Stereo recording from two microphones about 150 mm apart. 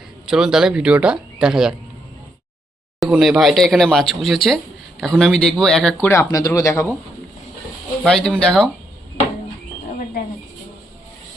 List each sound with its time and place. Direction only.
0.3 s speech: 5° right (ahead or behind)
3.0 s speech: centre (ahead or behind)
6.1 s speech: 20° left (ahead or behind)
8.0 s speech: 5° left (ahead or behind)